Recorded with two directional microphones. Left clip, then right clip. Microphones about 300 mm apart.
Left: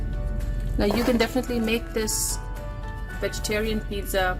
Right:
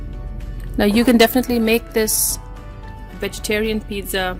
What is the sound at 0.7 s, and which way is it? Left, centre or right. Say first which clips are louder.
A woman's voice: right 8 dB; right.